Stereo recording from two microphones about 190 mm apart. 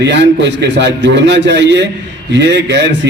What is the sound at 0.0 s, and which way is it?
A man's voice, 65° right (ahead or behind).